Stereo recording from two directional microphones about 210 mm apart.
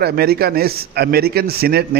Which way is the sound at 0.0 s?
50° right (ahead or behind).